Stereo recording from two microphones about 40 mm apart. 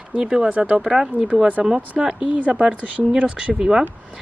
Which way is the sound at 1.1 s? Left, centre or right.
Left.